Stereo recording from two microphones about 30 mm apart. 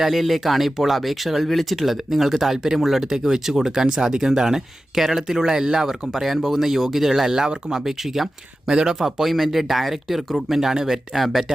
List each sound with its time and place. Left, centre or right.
0.0 s speech: centre; by 5.8 s right
5.8 s speech: centre; by 9.0 s right
9.0 s speech: centre